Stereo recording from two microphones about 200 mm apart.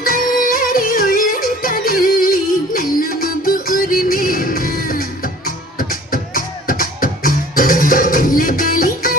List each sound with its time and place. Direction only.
0.0 s music: 45° left (ahead or behind)
6.3 s music: 45° left (ahead or behind)